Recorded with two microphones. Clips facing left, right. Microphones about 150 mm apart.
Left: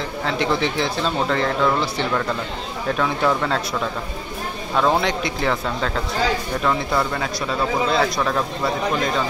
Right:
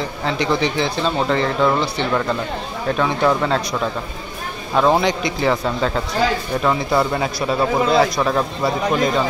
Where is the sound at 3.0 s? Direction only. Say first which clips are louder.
Right 3 dB; centre (ahead or behind).